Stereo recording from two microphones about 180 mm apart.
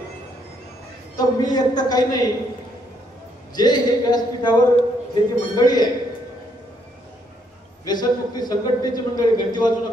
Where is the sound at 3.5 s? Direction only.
25° left (ahead or behind).